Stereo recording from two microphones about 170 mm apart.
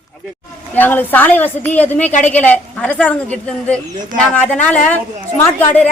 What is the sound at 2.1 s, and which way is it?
Speech, 40° left (ahead or behind).